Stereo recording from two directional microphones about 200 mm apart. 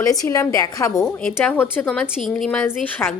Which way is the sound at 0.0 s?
15° left (ahead or behind).